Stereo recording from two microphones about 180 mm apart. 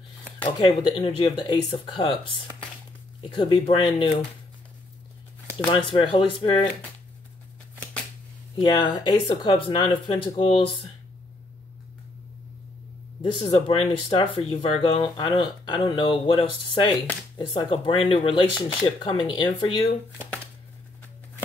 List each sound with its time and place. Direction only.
0.4 s speech: 30° left (ahead or behind)
5.7 s speech: 30° left (ahead or behind)
8.5 s speech: 25° left (ahead or behind)
13.2 s speech: 30° left (ahead or behind)